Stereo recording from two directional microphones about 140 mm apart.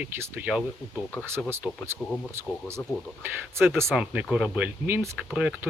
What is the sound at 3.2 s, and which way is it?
Speech, 15° right (ahead or behind).